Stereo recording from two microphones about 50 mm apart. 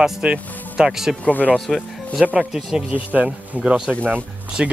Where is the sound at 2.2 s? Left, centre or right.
Right.